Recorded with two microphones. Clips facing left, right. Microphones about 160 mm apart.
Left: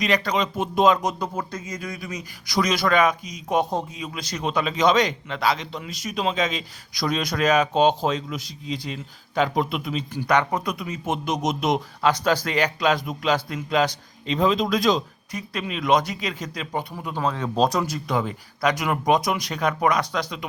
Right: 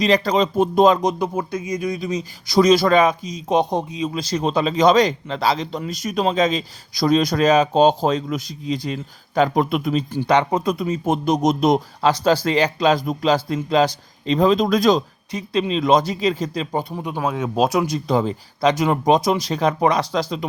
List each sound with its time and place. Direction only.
0.0 s a man's voice: 30° right (ahead or behind)
1.0 s speech: 10° right (ahead or behind)
4.1 s a man's voice: 30° right (ahead or behind); by 10.0 s 45° right (ahead or behind)
10.1 s a man's voice: 25° right (ahead or behind); by 15.0 s 45° right (ahead or behind)
15.3 s speech: 25° right (ahead or behind)
18.1 s a man's voice: 30° right (ahead or behind)